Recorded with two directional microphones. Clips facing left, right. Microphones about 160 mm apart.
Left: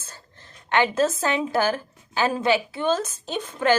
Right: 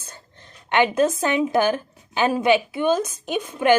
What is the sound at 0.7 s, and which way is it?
A woman's voice, 15° right (ahead or behind).